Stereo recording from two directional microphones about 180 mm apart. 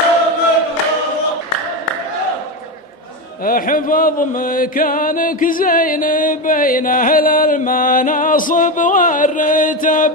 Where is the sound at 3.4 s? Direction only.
50° left (ahead or behind).